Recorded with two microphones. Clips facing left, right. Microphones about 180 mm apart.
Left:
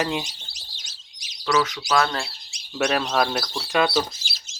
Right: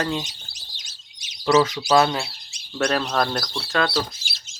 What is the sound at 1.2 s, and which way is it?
Speech, 25° right (ahead or behind).